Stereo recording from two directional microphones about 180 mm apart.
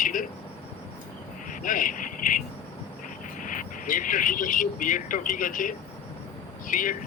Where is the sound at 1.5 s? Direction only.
50° left (ahead or behind).